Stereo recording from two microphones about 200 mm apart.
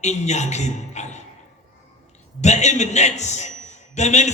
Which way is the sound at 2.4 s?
35° left (ahead or behind).